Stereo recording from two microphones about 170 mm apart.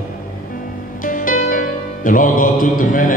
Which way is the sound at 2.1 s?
50° left (ahead or behind).